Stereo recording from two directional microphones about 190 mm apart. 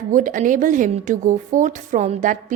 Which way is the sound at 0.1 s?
45° right (ahead or behind).